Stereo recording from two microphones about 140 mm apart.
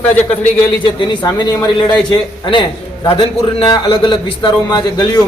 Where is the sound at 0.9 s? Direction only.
30° left (ahead or behind).